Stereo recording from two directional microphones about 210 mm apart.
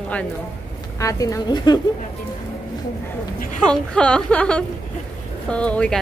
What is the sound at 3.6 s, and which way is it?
A woman's voice, 5° left (ahead or behind).